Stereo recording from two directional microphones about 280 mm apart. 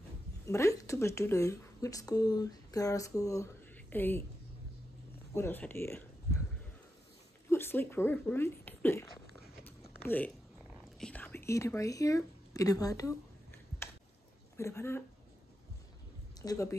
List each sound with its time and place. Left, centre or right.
0.5 s speech: centre
5.3 s speech: centre
7.4 s speech: centre
9.7 s a sound: centre
11.0 s speech: centre
14.6 s speech: centre
16.3 s a woman's voice: centre